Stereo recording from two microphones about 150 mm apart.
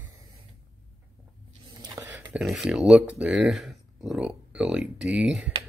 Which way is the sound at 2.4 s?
Centre (ahead or behind).